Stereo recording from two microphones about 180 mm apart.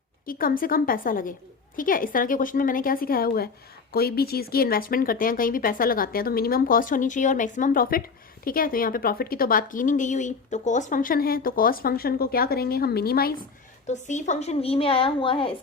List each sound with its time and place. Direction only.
0.3 s speech: 50° left (ahead or behind)
13.8 s a woman's voice: 40° left (ahead or behind)